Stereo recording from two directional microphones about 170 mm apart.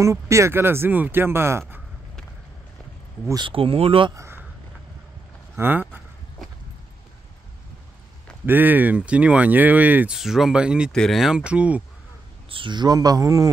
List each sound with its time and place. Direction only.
0.0 s speech: 15° right (ahead or behind)
3.3 s speech: 30° right (ahead or behind)
4.1 s speech: 15° right (ahead or behind)
5.6 s speech: 10° right (ahead or behind)
8.5 s speech: 10° right (ahead or behind)
12.4 s speech: 30° right (ahead or behind)